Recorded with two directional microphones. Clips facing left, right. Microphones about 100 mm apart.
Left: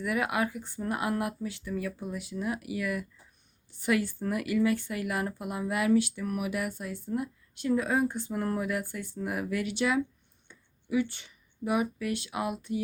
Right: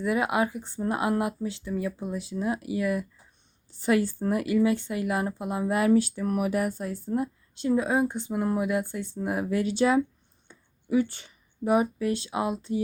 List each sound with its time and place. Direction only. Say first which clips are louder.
0.0 s speech: right 4 dB; 25° right (ahead or behind)